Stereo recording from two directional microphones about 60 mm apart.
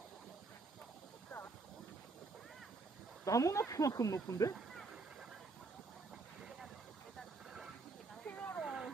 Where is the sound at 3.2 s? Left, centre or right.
Left.